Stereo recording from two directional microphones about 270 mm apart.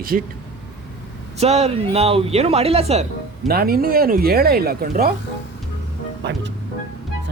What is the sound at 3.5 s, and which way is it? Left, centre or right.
Speech, right.